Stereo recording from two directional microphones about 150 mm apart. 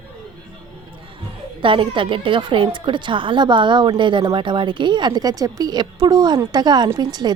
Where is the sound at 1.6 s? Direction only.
35° right (ahead or behind).